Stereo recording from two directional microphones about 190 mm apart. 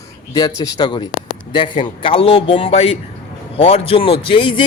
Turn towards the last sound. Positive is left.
turn(degrees=30)  # may be behind; listen again after turning